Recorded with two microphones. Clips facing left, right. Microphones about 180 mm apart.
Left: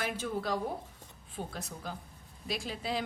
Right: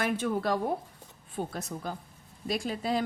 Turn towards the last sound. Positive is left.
turn(degrees=-45)  # may be behind; listen again after turning